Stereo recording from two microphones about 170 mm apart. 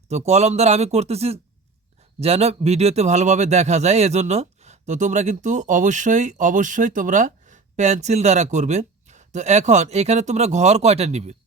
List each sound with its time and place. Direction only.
0.1 s a man's voice: 40° right (ahead or behind)